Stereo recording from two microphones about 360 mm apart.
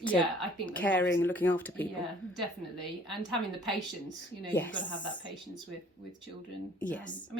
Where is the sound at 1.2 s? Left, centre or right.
Centre.